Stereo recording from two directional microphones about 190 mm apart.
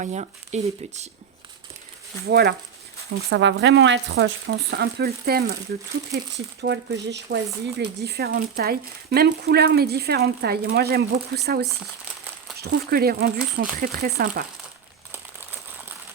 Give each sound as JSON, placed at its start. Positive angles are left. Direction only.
{"t": 0.0, "sound": "speech", "side_deg": -35}
{"t": 2.2, "sound": "speech", "side_deg": -60}
{"t": 3.2, "sound": "speech", "side_deg": -70}
{"t": 6.3, "sound": "speech", "side_deg": -65}